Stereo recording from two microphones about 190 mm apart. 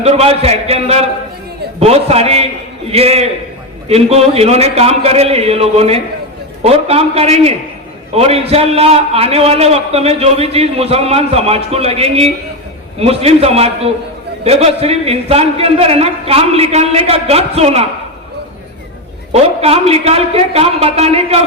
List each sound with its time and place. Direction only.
0.0 s a man's voice: 30° right (ahead or behind)
19.3 s a man's voice: 30° right (ahead or behind)